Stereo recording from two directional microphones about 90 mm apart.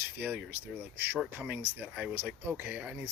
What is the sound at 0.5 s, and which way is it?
Speech, 25° right (ahead or behind).